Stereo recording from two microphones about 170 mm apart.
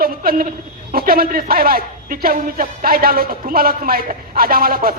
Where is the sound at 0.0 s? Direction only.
60° right (ahead or behind).